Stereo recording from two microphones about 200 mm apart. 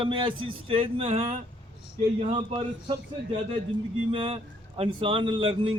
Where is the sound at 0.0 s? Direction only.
25° right (ahead or behind).